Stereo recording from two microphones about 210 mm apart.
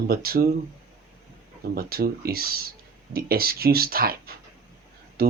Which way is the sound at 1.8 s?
45° right (ahead or behind).